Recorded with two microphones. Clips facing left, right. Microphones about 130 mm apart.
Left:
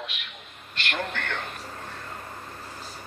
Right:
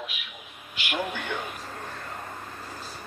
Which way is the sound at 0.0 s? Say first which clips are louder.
Even; 5° right (ahead or behind).